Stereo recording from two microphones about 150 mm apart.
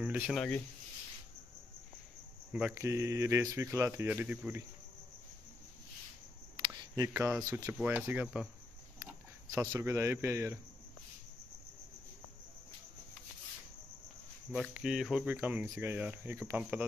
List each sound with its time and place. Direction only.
0.0 s speech: 5° right (ahead or behind)
2.7 s speech: 20° right (ahead or behind)
6.7 s a sound: 20° right (ahead or behind)
7.4 s speech: 15° right (ahead or behind)
9.0 s speech: 20° right (ahead or behind)
14.5 s speech: 5° right (ahead or behind)
15.3 s speech: 15° right (ahead or behind)